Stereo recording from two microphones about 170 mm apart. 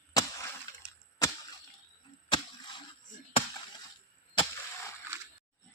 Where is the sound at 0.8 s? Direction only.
5° right (ahead or behind).